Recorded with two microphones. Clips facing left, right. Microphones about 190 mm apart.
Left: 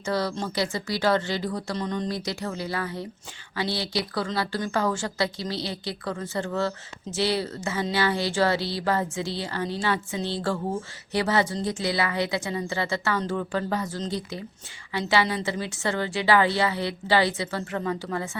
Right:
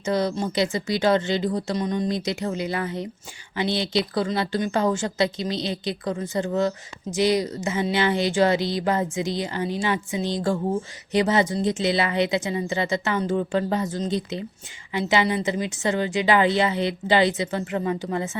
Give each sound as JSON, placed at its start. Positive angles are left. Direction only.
{"t": 0.0, "sound": "a woman's voice", "side_deg": -20}